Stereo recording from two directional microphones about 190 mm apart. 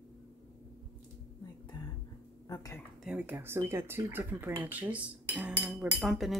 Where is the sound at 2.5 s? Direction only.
15° left (ahead or behind).